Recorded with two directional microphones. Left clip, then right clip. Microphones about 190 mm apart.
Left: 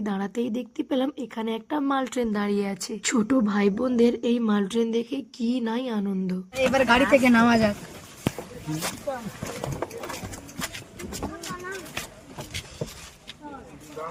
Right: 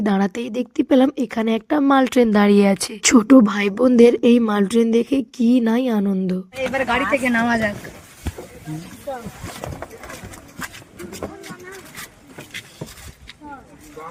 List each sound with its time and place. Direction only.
0.0 s speech: 30° right (ahead or behind)
6.7 s speech: 15° left (ahead or behind)